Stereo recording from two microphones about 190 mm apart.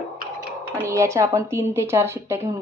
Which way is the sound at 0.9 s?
15° right (ahead or behind).